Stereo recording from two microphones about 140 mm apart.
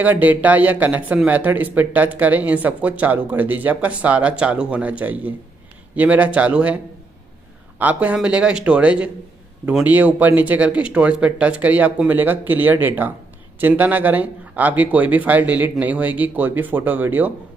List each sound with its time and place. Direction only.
0.0 s speech: 10° right (ahead or behind)
7.8 s speech: 10° right (ahead or behind)